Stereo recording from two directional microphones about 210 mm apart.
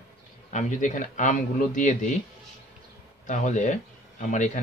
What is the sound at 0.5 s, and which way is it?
Speech, 35° left (ahead or behind).